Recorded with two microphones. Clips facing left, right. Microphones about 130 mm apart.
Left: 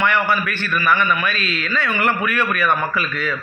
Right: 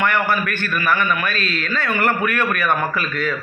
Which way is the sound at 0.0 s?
45° right (ahead or behind).